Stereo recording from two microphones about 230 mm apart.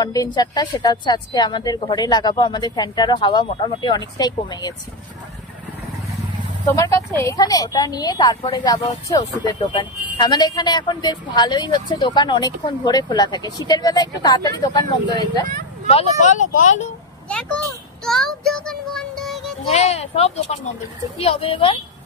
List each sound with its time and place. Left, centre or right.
0.0 s a woman's voice: centre
6.6 s a woman's voice: centre
15.9 s speech: left
17.3 s speech: centre
18.0 s music: centre
19.7 s a woman's voice: left